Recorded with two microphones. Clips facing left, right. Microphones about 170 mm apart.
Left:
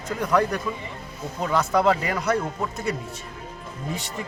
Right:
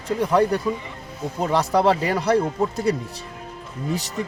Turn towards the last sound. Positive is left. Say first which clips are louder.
# right 5 dB
turn(degrees=-40)  # may be behind; listen again after turning